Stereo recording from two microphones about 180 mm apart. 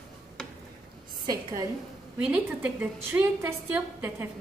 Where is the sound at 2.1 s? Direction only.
5° right (ahead or behind).